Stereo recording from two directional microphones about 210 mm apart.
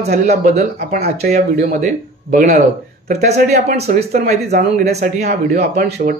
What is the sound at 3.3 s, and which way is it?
Speech, 50° right (ahead or behind).